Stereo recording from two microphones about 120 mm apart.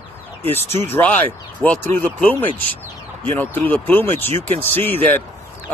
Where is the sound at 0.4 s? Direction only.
15° left (ahead or behind).